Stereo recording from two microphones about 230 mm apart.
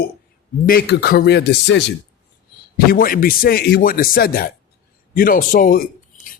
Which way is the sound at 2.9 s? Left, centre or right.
Left.